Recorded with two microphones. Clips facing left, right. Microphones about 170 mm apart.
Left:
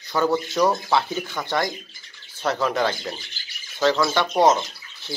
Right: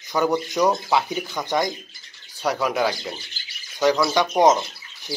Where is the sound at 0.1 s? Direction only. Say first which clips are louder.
Even; 15° right (ahead or behind).